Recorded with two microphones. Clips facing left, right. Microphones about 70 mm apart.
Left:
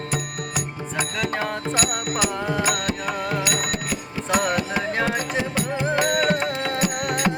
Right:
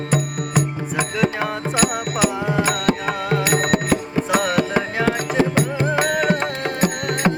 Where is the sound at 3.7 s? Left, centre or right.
Right.